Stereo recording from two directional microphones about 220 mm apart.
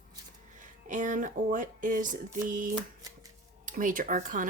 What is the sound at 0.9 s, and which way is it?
Speech, 35° right (ahead or behind).